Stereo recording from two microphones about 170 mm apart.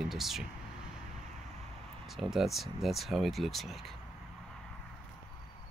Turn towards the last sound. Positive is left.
turn(degrees=0)  # may be behind; listen again after turning